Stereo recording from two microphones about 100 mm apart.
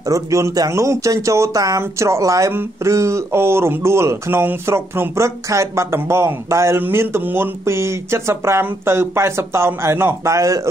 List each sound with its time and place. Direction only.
0.0 s speech: 35° right (ahead or behind)